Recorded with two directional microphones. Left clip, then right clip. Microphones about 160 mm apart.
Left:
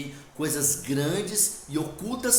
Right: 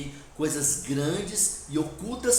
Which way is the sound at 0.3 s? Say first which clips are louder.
Even; 25° left (ahead or behind).